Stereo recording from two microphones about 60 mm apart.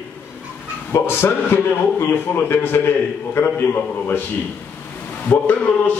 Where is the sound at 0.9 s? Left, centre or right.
Left.